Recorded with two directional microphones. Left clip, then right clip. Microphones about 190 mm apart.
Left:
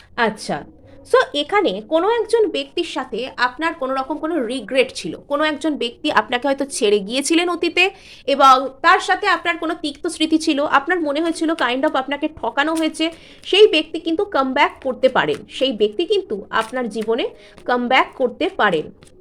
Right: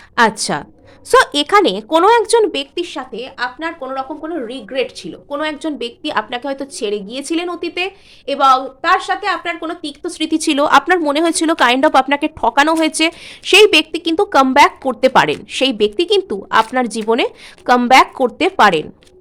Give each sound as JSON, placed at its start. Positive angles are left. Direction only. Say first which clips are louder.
{"t": 0.2, "sound": "a woman's voice", "louder": "right 6 dB", "side_deg": -30}
{"t": 2.7, "sound": "a woman's voice", "louder": "even", "side_deg": 0}
{"t": 3.1, "sound": "a woman's voice", "louder": "left 2 dB", "side_deg": 15}